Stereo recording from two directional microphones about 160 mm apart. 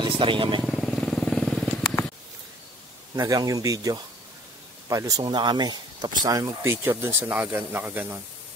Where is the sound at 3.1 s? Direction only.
20° right (ahead or behind).